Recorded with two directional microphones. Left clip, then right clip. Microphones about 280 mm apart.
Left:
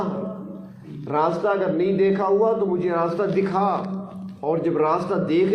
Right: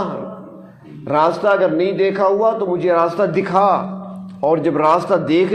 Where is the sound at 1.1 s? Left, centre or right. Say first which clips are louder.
Right 7 dB; right.